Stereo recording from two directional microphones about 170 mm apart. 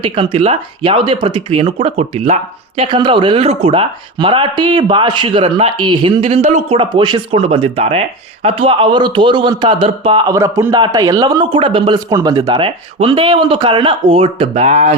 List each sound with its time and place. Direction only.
0.0 s a man's voice: 35° right (ahead or behind)
10.2 s a man's voice: 20° right (ahead or behind); by 14.9 s 40° right (ahead or behind)